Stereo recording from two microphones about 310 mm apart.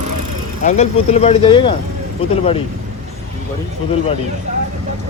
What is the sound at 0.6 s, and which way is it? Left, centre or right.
Speech, left.